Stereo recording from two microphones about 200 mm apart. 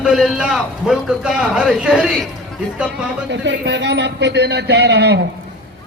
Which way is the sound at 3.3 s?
60° right (ahead or behind).